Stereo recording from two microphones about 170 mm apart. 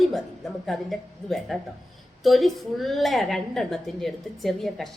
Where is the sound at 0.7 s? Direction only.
Centre (ahead or behind).